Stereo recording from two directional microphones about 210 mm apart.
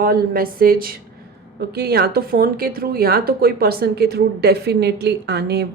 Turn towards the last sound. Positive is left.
turn(degrees=-50)  # may be behind; listen again after turning